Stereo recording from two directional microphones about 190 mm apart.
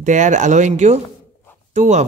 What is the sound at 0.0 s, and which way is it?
A man's voice, 40° right (ahead or behind).